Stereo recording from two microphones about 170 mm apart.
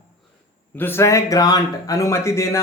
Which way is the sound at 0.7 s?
15° left (ahead or behind).